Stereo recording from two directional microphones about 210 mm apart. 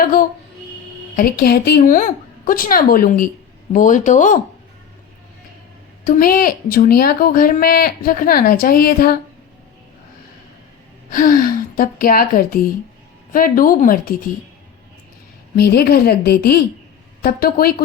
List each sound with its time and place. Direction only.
0.0 s a woman's voice: 40° left (ahead or behind)
6.1 s a woman's voice: 40° left (ahead or behind)
11.1 s a woman's voice: 40° left (ahead or behind)
15.5 s a woman's voice: 50° left (ahead or behind)